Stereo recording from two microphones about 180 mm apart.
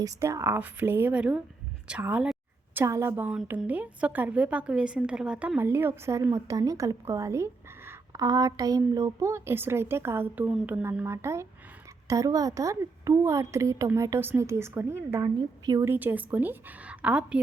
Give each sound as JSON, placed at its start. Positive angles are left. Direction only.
{"t": 0.0, "sound": "a woman's voice", "side_deg": -15}